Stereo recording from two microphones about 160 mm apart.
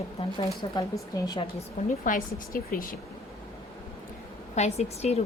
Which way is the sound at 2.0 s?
60° left (ahead or behind).